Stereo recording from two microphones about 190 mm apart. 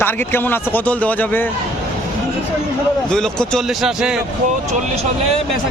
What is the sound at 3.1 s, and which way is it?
Speech, 5° left (ahead or behind).